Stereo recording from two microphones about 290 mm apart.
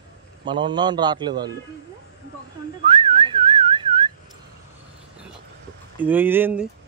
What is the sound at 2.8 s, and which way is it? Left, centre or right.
Whistling, centre.